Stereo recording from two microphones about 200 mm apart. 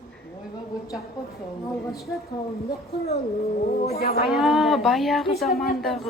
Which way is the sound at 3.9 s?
50° left (ahead or behind).